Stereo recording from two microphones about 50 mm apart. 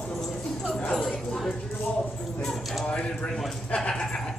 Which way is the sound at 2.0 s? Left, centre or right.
Left.